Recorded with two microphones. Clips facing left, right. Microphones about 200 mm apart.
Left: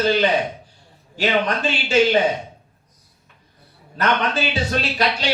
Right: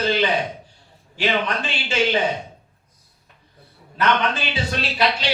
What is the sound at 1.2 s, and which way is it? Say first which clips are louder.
Speech: left 2 dB; 40° left (ahead or behind).